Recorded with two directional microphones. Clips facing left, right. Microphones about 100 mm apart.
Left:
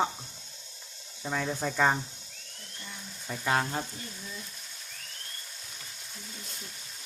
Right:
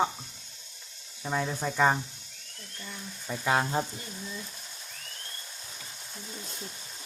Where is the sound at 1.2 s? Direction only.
5° right (ahead or behind).